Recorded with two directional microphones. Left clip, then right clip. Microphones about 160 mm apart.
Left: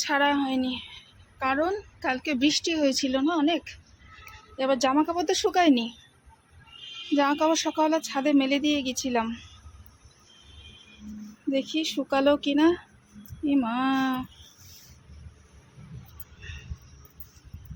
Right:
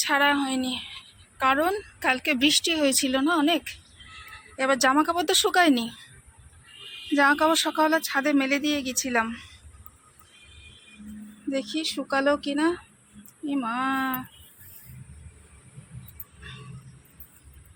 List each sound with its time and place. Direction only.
0.1 s speech: 10° left (ahead or behind)
4.6 s speech: 5° left (ahead or behind)
7.2 s speech: centre (ahead or behind)
8.1 s speech: 15° left (ahead or behind)
11.4 s speech: 20° left (ahead or behind)